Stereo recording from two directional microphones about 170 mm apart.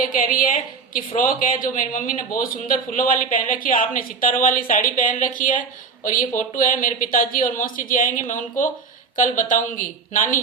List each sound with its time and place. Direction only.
0.0 s a woman's voice: 55° left (ahead or behind)